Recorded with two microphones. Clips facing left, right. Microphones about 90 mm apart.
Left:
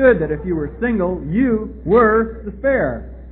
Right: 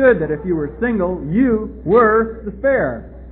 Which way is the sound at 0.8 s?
5° right (ahead or behind).